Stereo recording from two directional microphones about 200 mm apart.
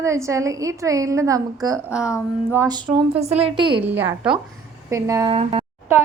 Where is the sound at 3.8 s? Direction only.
10° right (ahead or behind).